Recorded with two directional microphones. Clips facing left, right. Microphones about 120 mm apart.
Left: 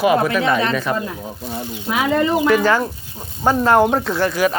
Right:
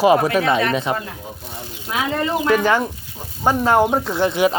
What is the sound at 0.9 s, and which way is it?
Speech, 15° right (ahead or behind).